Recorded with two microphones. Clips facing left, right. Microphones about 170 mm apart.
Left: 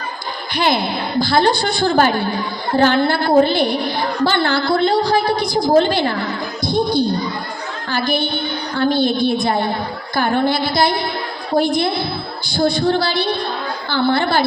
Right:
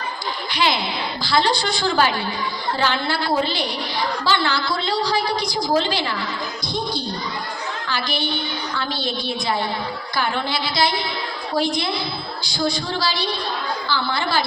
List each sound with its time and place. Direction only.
0.5 s a woman's voice: 55° left (ahead or behind)